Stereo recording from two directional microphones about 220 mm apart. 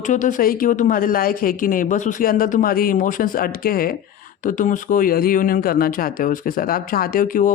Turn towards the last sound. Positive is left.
turn(degrees=40)  # may be behind; listen again after turning